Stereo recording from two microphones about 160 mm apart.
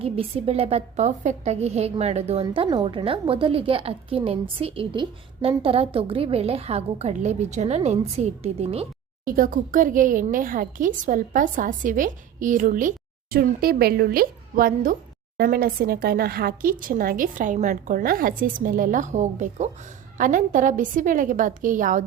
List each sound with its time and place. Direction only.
0.0 s a woman's voice: 35° right (ahead or behind)
9.2 s a woman's voice: 60° right (ahead or behind)
13.3 s a woman's voice: 70° right (ahead or behind); by 22.0 s 55° right (ahead or behind)